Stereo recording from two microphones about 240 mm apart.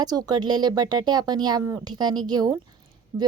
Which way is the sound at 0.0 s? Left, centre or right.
Centre.